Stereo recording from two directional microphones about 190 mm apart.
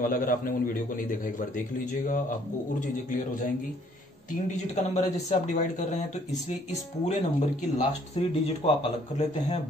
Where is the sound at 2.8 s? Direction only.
40° left (ahead or behind).